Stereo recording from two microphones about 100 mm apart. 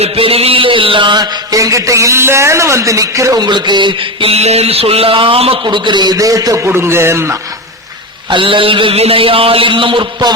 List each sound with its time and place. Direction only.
0.0 s mantra: 75° right (ahead or behind); by 3.4 s 35° right (ahead or behind)
3.4 s a man's voice: 50° right (ahead or behind)
4.3 s a sound: 90° right; by 5.5 s 70° right (ahead or behind)
5.6 s a man's voice: 50° right (ahead or behind)
6.6 s speech: 25° right (ahead or behind)
8.3 s a sound: 60° right (ahead or behind)